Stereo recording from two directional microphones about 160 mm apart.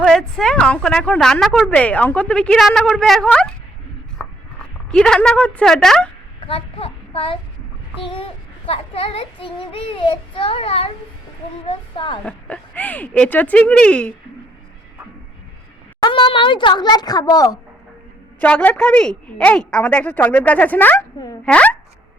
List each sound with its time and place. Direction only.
0.0 s a woman's voice: 5° left (ahead or behind)
4.2 s a sound: 5° left (ahead or behind)
6.5 s child singing: 35° left (ahead or behind)
12.2 s a woman's voice: 10° left (ahead or behind)
16.0 s speech: 30° left (ahead or behind)
18.3 s a woman's voice: 10° left (ahead or behind)